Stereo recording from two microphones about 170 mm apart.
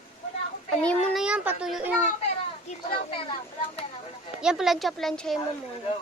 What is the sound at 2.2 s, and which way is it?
Speech, 35° left (ahead or behind).